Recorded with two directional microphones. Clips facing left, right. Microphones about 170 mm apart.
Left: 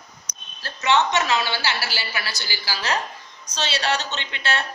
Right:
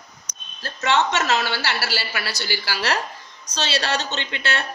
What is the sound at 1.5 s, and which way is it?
A woman's voice, 65° right (ahead or behind).